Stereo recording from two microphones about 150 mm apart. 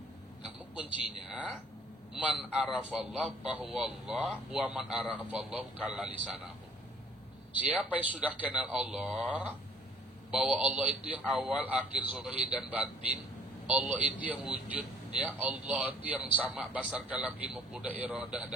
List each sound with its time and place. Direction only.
2.1 s a man's voice: 5° right (ahead or behind)
7.6 s a man's voice: 10° right (ahead or behind)